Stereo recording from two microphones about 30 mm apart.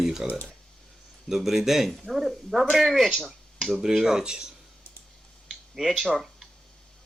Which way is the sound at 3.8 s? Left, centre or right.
Centre.